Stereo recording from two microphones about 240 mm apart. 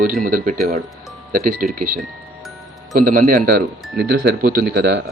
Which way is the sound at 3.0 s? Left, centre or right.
Right.